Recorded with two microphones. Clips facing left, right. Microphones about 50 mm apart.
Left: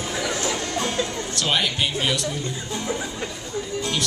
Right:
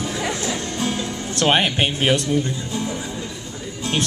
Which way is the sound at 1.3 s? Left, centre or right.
Right.